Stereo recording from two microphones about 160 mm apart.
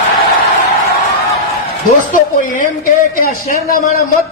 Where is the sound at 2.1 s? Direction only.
55° left (ahead or behind).